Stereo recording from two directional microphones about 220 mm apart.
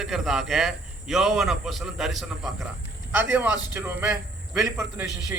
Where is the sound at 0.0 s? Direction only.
Centre (ahead or behind).